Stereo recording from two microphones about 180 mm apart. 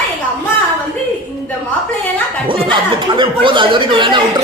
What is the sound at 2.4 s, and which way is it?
Speech, 30° right (ahead or behind).